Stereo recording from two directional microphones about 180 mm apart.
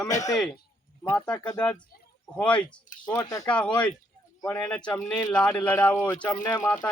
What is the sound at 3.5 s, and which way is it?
A man's voice, 5° left (ahead or behind).